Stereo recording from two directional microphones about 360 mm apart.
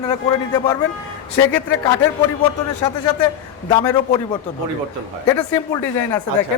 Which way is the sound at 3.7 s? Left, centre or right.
Centre.